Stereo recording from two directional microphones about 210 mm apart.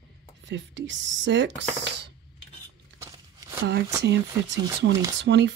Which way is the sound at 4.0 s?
55° right (ahead or behind).